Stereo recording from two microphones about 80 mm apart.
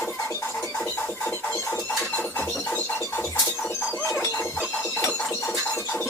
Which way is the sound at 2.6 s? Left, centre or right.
Left.